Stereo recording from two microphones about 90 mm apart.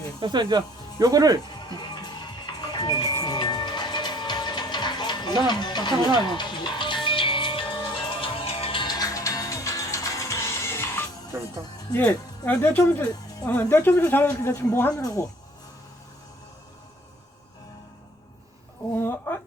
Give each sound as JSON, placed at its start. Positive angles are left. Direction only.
{"t": 0.2, "sound": "speech", "side_deg": -55}
{"t": 1.6, "sound": "music", "side_deg": 50}
{"t": 5.5, "sound": "speech", "side_deg": 55}
{"t": 6.2, "sound": "music", "side_deg": 60}
{"t": 8.9, "sound": "music", "side_deg": 45}
{"t": 12.5, "sound": "a woman's voice", "side_deg": 20}
{"t": 12.8, "sound": "a woman's voice", "side_deg": 30}
{"t": 15.0, "sound": "speech", "side_deg": 35}
{"t": 18.9, "sound": "a sound", "side_deg": 25}